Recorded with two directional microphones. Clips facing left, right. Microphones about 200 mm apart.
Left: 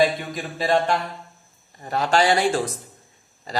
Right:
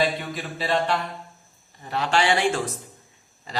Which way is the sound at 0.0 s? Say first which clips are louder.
Left 4 dB; 45° left (ahead or behind).